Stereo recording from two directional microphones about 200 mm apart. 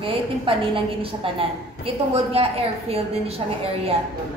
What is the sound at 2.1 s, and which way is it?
A woman's voice, 30° right (ahead or behind).